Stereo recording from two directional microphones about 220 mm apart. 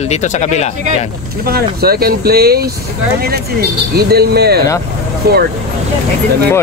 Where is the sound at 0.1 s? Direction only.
30° left (ahead or behind).